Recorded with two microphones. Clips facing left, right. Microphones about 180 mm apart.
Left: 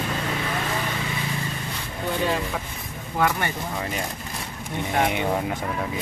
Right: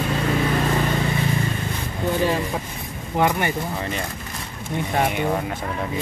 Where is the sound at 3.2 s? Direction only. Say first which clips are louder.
Right 3 dB; 15° right (ahead or behind).